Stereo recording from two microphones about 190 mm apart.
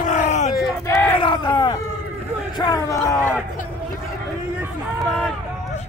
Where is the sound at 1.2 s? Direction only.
25° left (ahead or behind).